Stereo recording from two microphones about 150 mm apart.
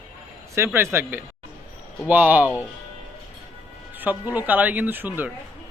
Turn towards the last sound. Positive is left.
turn(degrees=-10)  # may be behind; listen again after turning